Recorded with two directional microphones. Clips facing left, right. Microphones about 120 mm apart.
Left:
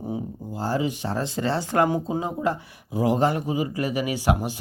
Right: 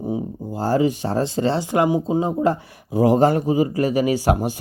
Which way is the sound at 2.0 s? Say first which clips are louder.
Right 6 dB; 25° right (ahead or behind).